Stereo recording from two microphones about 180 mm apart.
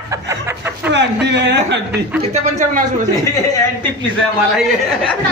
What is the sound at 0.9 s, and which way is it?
Speech, 75° right (ahead or behind).